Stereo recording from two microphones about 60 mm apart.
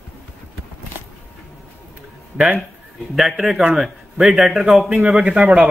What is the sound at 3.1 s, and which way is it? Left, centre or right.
A man's voice, centre.